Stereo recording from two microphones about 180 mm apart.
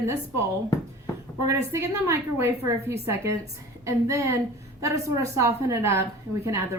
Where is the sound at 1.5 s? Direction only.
15° right (ahead or behind).